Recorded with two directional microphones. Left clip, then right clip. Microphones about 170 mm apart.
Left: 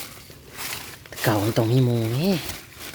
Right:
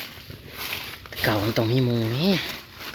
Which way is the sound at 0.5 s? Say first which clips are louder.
Right 1 dB; 15° left (ahead or behind).